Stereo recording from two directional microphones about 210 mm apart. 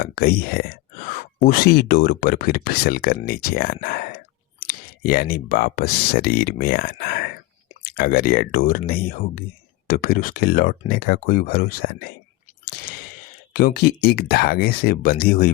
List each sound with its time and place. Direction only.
0.0 s speech: 45° left (ahead or behind)
13.5 s speech: 45° left (ahead or behind)